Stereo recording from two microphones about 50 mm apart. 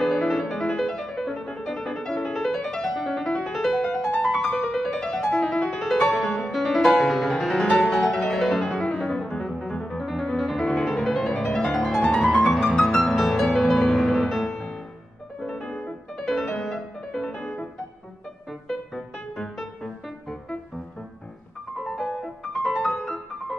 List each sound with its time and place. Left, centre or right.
0.0 s music: centre
12.2 s music: left
12.8 s music: centre
18.7 s music: centre
21.8 s music: centre